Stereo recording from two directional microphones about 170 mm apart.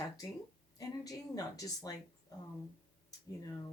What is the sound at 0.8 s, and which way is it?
Speech, 20° left (ahead or behind).